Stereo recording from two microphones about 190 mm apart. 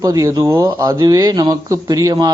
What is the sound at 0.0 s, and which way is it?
Speech, 20° right (ahead or behind).